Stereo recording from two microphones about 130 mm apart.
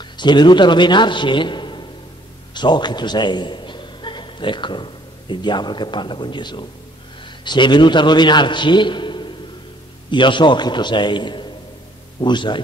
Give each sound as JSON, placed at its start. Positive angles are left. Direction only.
{"t": 0.0, "sound": "a man's voice", "side_deg": 35}